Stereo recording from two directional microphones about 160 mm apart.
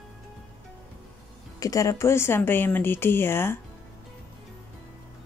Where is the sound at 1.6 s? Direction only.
20° left (ahead or behind).